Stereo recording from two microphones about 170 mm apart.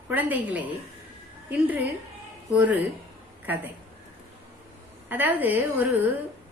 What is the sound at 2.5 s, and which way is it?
Speech, 10° right (ahead or behind).